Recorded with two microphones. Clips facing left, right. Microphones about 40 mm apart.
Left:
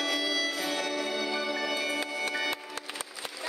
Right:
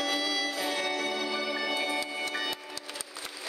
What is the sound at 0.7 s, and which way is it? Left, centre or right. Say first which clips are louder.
Music: even; right.